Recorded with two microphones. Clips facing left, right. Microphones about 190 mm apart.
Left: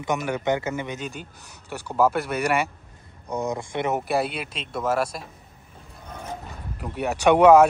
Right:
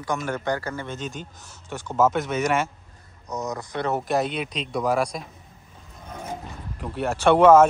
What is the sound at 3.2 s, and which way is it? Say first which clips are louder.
Speech: left 3 dB; 30° left (ahead or behind).